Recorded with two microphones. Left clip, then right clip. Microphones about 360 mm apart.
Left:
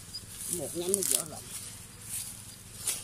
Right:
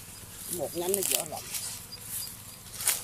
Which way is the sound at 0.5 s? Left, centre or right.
Right.